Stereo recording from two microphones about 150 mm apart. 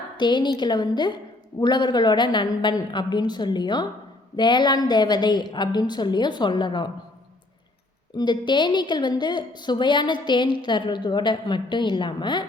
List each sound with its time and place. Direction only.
0.2 s a woman's voice: 30° left (ahead or behind)
8.1 s a woman's voice: 30° left (ahead or behind)